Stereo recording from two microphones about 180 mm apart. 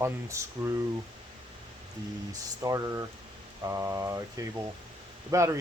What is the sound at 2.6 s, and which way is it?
Speech, 20° right (ahead or behind).